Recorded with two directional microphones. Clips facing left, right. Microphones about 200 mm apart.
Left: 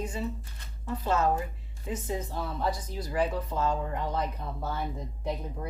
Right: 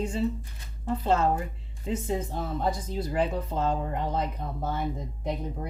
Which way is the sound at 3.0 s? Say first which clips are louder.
Right 1 dB; 25° right (ahead or behind).